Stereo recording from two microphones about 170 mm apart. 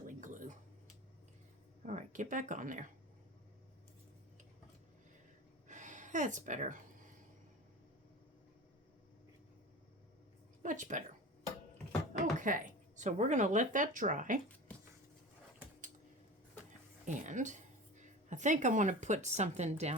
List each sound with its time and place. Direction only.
0.1 s tick-tock: 50° right (ahead or behind)
1.8 s speech: 45° right (ahead or behind)
5.6 s a sound: 45° right (ahead or behind)
10.6 s a sound: 45° right (ahead or behind)
12.4 s speech: 50° right (ahead or behind)
17.1 s speech: 45° right (ahead or behind)